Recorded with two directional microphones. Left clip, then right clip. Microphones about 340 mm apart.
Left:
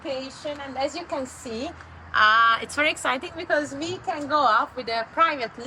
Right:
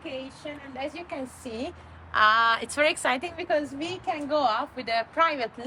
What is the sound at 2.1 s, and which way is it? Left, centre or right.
Speech, right.